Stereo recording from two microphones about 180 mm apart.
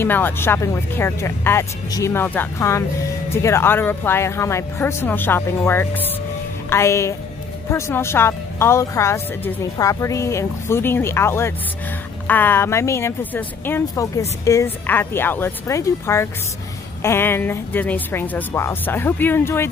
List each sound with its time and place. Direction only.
0.0 s a woman's voice: 10° left (ahead or behind)